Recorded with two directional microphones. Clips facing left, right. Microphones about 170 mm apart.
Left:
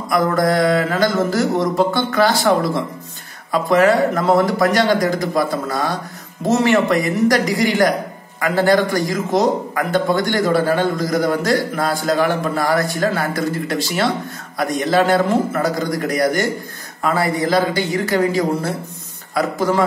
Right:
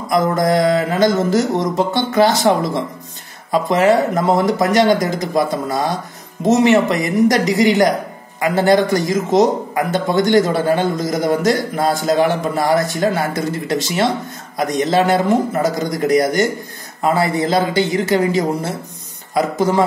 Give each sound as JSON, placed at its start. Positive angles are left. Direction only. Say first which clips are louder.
{"t": 0.1, "sound": "a man's voice", "louder": "right 1 dB", "side_deg": -20}